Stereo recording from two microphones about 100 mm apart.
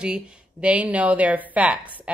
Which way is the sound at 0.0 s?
10° right (ahead or behind).